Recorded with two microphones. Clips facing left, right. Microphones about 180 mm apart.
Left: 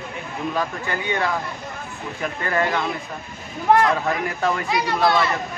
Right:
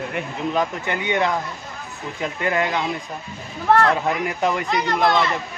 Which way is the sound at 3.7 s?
15° left (ahead or behind).